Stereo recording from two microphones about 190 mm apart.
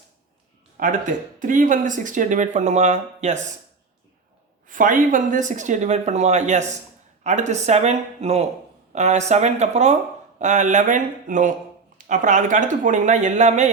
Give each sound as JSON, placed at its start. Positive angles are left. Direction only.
{"t": 0.8, "sound": "speech", "side_deg": -45}
{"t": 4.7, "sound": "speech", "side_deg": -45}